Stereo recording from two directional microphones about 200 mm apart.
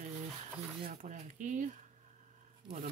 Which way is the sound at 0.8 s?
40° right (ahead or behind).